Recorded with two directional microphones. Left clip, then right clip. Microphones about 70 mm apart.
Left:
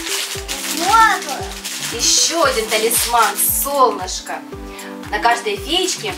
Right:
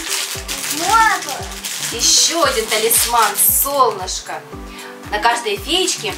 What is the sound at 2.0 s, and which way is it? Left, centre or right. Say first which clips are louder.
Speech: right 1 dB; centre.